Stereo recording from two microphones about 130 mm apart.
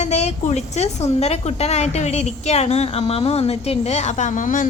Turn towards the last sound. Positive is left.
turn(degrees=90)